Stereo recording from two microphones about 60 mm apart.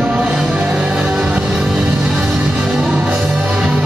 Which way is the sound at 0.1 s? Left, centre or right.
Centre.